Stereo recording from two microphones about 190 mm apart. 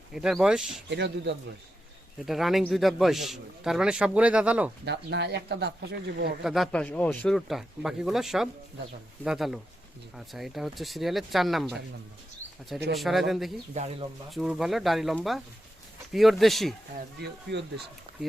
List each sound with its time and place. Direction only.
0.1 s a man's voice: centre (ahead or behind)
0.9 s speech: 65° right (ahead or behind)
2.2 s a man's voice: centre (ahead or behind)
4.9 s speech: 65° right (ahead or behind)
6.4 s a man's voice: centre (ahead or behind)
12.9 s a man's voice: centre (ahead or behind)
13.7 s speech: 35° right (ahead or behind)
14.3 s a man's voice: centre (ahead or behind)
17.2 s speech: 60° right (ahead or behind)